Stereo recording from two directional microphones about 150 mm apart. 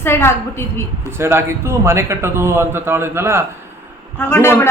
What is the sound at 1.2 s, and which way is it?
Speech, 15° right (ahead or behind).